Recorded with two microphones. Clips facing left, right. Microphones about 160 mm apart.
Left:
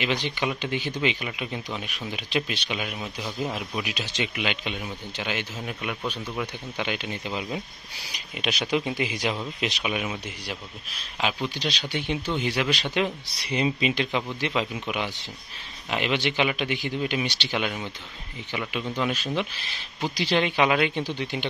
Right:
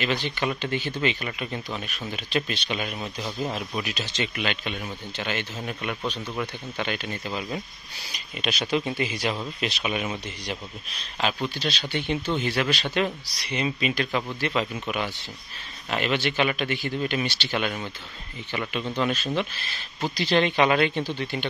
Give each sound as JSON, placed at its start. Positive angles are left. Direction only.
{"t": 0.0, "sound": "speech", "side_deg": 15}
{"t": 13.3, "sound": "speech", "side_deg": 30}